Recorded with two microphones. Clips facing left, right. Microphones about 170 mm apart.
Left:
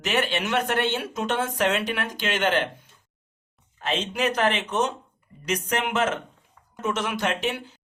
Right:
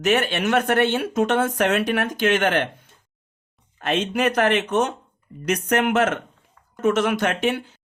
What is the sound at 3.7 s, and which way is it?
Speech, 55° right (ahead or behind).